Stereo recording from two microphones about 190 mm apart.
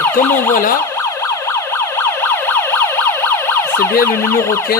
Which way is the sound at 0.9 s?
15° left (ahead or behind).